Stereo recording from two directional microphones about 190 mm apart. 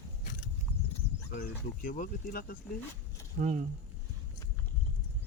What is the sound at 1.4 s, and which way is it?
Speech, 50° left (ahead or behind).